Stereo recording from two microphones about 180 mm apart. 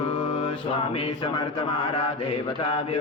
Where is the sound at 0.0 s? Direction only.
25° left (ahead or behind).